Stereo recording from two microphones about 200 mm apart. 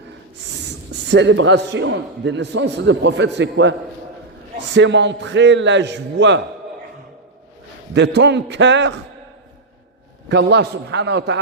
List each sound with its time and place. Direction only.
1.1 s a man's voice: 65° right (ahead or behind)
7.9 s a man's voice: 60° right (ahead or behind)
10.2 s a man's voice: 60° right (ahead or behind)